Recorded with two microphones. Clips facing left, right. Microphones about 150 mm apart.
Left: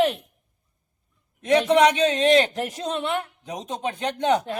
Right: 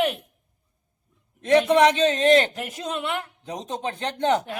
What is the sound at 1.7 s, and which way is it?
Speech, 15° left (ahead or behind).